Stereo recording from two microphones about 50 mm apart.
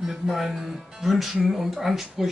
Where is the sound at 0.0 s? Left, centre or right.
Centre.